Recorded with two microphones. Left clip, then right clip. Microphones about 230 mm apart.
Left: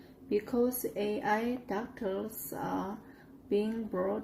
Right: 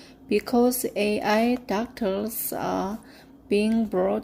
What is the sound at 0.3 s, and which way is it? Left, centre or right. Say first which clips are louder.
Speech: right 9 dB; right.